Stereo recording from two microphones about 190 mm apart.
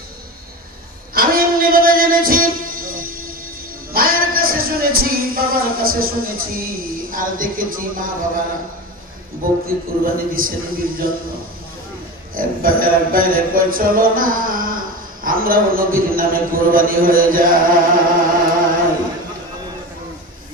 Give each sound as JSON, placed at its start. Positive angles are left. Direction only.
{"t": 1.1, "sound": "music", "side_deg": -50}
{"t": 9.4, "sound": "speech", "side_deg": -50}
{"t": 12.3, "sound": "speech", "side_deg": -50}